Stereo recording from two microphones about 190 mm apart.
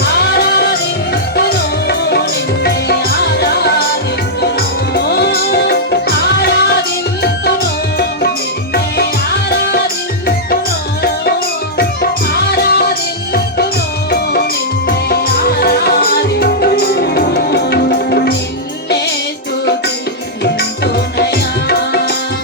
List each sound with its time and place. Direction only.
0.0 s music: 60° left (ahead or behind)
4.9 s music: 60° left (ahead or behind)
8.7 s music: 55° left (ahead or behind)
12.3 s music: 55° left (ahead or behind)
14.8 s music: 55° left (ahead or behind)
20.4 s music: 60° left (ahead or behind)